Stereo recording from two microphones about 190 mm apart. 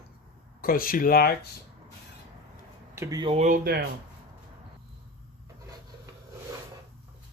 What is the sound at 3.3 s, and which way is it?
Speech, 45° right (ahead or behind).